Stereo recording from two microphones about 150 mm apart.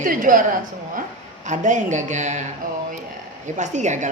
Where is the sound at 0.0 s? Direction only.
65° right (ahead or behind).